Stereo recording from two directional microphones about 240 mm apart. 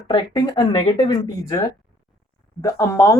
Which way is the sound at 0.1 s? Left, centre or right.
Centre.